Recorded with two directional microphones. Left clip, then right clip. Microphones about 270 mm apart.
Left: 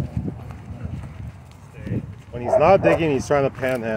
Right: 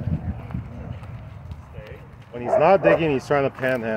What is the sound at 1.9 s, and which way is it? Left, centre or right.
Clip-clop, centre.